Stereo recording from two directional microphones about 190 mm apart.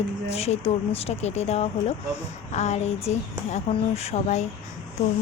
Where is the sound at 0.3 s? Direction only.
35° left (ahead or behind).